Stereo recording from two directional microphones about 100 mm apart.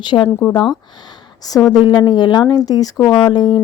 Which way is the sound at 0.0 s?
50° left (ahead or behind).